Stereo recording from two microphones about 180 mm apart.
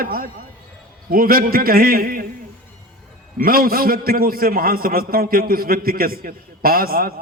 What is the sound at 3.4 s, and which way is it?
A man's voice, 55° right (ahead or behind).